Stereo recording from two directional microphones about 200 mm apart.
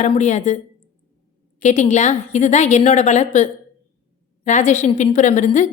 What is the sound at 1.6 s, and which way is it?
A woman's voice, 35° left (ahead or behind).